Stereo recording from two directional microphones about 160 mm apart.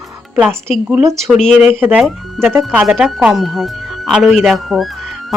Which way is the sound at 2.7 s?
5° right (ahead or behind).